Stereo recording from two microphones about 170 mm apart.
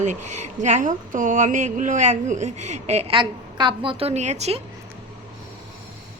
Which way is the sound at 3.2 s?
30° right (ahead or behind).